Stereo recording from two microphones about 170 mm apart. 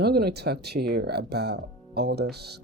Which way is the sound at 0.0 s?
70° right (ahead or behind).